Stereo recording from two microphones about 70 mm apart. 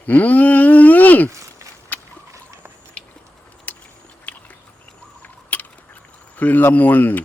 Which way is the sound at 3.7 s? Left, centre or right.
Left.